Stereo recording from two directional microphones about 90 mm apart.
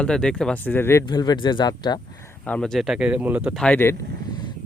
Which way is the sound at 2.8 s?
5° right (ahead or behind).